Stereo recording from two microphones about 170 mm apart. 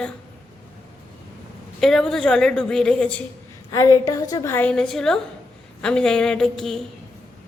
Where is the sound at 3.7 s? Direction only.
20° left (ahead or behind).